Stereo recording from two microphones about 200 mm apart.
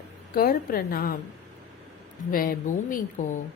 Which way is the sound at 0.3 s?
50° left (ahead or behind).